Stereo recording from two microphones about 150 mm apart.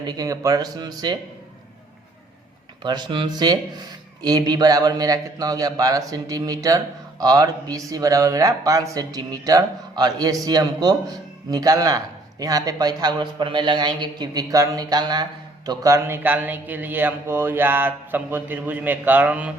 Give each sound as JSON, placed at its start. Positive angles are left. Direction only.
{"t": 0.0, "sound": "a man's voice", "side_deg": -25}
{"t": 2.8, "sound": "a man's voice", "side_deg": -30}